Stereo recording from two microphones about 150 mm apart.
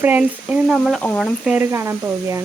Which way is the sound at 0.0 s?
10° right (ahead or behind).